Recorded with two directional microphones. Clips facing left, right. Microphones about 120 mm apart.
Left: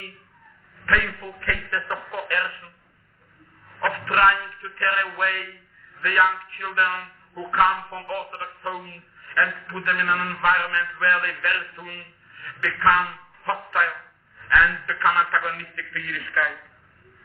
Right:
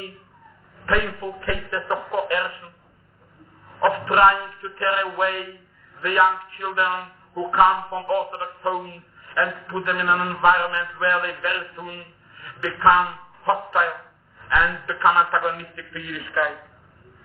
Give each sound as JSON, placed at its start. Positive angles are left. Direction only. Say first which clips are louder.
{"t": 0.8, "sound": "speech", "louder": "right 2 dB", "side_deg": -20}